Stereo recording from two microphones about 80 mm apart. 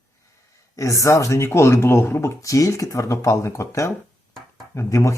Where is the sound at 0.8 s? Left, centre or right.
Left.